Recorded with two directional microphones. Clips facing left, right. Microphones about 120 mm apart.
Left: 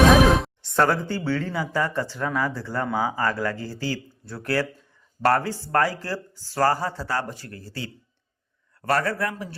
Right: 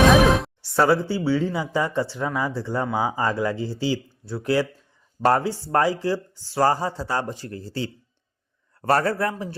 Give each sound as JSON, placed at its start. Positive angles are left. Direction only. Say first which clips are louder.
{"t": 0.3, "sound": "speech", "louder": "even", "side_deg": 0}